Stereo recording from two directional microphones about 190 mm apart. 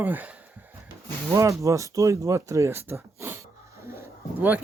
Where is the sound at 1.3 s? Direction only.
15° right (ahead or behind).